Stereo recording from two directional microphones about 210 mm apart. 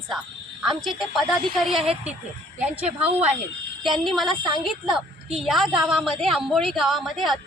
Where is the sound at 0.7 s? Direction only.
Centre (ahead or behind).